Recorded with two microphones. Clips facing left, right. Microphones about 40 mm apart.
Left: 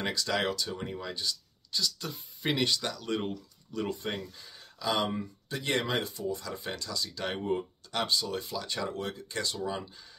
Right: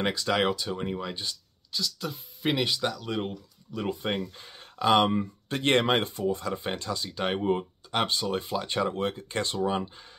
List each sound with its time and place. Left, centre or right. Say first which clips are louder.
0.0 s speech: right 4 dB; right
1.7 s speech: right 1 dB; centre
4.4 s speech: right 10 dB; right